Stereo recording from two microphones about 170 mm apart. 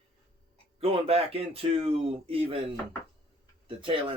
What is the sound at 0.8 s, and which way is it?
Speech, 35° right (ahead or behind).